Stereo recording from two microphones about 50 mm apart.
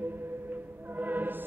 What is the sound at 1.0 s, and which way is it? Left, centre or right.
Music, right.